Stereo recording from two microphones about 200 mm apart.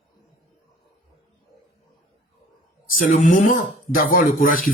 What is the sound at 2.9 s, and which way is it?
A woman's voice, 40° left (ahead or behind).